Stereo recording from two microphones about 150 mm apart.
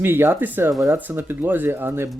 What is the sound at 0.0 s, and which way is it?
Speech, 15° right (ahead or behind).